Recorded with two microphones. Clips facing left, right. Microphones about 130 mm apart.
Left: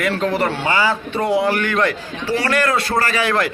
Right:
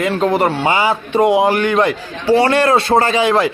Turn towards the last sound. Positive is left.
turn(degrees=-20)  # may be behind; listen again after turning